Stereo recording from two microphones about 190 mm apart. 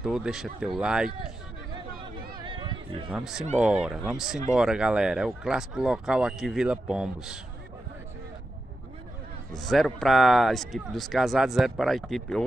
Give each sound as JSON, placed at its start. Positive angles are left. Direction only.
{"t": 0.0, "sound": "speech", "side_deg": -5}
{"t": 2.3, "sound": "a sound", "side_deg": -25}
{"t": 3.1, "sound": "speech", "side_deg": -5}
{"t": 9.6, "sound": "speech", "side_deg": 0}